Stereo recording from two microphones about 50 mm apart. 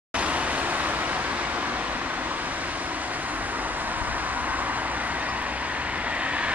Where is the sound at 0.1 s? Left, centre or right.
Right.